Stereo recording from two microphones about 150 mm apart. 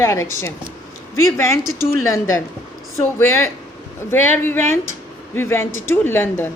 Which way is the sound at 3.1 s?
15° left (ahead or behind).